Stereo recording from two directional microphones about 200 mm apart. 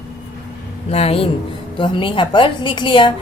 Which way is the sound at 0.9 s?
30° left (ahead or behind).